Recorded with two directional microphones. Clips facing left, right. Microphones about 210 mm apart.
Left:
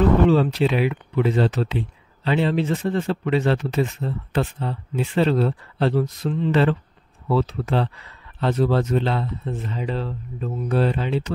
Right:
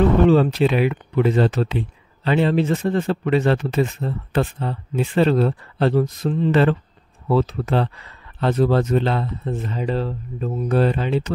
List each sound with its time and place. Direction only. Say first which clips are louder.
0.3 s speech: right 3 dB; 50° right (ahead or behind)